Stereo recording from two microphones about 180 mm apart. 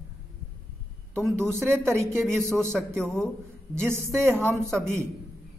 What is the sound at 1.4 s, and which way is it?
Speech, 15° right (ahead or behind).